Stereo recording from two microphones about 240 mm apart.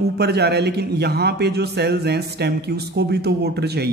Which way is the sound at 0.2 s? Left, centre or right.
Right.